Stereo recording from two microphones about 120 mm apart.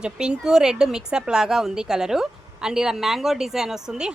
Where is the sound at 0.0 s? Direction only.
5° right (ahead or behind).